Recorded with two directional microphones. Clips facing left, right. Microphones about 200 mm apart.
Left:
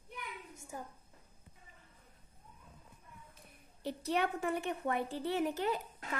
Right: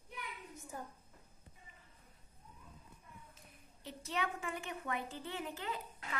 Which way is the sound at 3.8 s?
60° left (ahead or behind).